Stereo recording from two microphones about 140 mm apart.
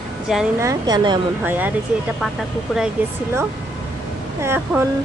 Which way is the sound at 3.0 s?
15° right (ahead or behind).